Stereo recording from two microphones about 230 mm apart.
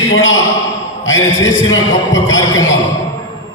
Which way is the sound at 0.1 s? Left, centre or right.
Left.